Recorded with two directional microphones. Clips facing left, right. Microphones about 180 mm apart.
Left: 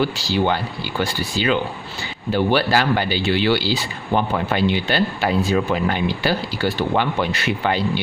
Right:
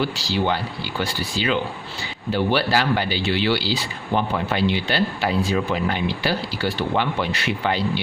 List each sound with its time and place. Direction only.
0.0 s speech: 50° left (ahead or behind)